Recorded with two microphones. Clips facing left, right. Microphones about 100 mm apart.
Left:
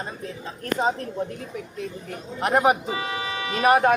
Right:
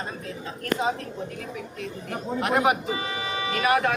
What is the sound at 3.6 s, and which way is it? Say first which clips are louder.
Speech: left 5 dB; 35° left (ahead or behind).